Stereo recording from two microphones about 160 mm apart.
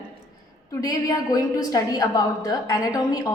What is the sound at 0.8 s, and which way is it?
A woman's voice, 20° left (ahead or behind).